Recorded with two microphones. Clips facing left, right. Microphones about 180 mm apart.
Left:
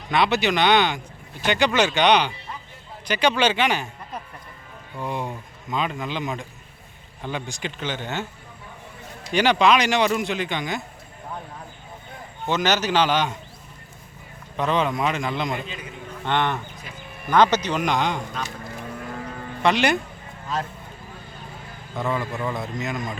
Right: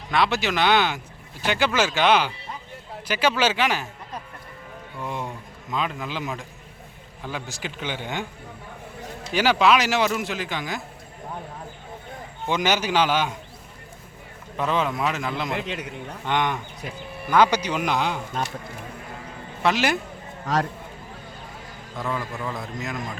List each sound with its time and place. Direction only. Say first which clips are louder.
0.1 s speech: left 2 dB; centre (ahead or behind)
4.9 s speech: left 3 dB; centre (ahead or behind)
9.3 s speech: left 1 dB; 5° right (ahead or behind)
12.5 s speech: left 1 dB; 10° right (ahead or behind)
14.5 s speech: left 2 dB; 5° right (ahead or behind)
15.5 s a man's voice: right 3 dB; 75° right (ahead or behind)
16.2 s speech: left 1 dB; 10° right (ahead or behind)
19.6 s speech: left 2 dB; 5° right (ahead or behind)
20.5 s speech: right 4 dB; 85° right
21.9 s speech: left 3 dB; centre (ahead or behind)